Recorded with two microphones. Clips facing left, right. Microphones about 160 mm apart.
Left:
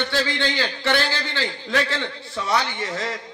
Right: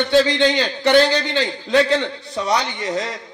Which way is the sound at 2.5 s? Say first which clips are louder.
Right 3 dB; 20° right (ahead or behind).